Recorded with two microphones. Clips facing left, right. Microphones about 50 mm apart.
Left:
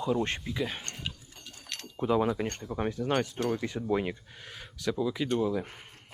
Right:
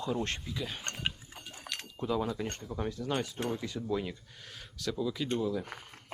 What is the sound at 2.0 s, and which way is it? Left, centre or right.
Speech, left.